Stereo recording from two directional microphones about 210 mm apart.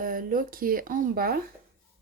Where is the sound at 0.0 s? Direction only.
40° right (ahead or behind).